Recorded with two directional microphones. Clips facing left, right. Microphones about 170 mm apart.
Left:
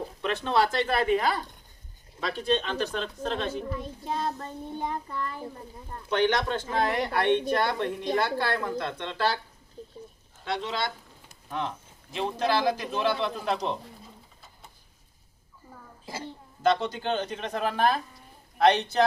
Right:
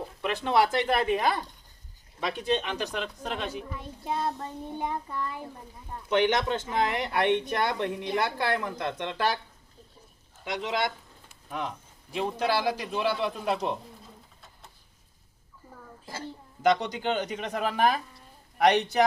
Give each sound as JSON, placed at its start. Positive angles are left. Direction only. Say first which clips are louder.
{"t": 0.2, "sound": "a man's voice", "louder": "right 1 dB", "side_deg": -15}
{"t": 10.4, "sound": "a man's voice", "louder": "right 1 dB", "side_deg": -15}
{"t": 12.1, "sound": "a man's voice", "louder": "left 1 dB", "side_deg": -10}
{"t": 14.0, "sound": "pigeon", "louder": "left 1 dB", "side_deg": 0}
{"t": 16.6, "sound": "a man's voice", "louder": "even", "side_deg": -15}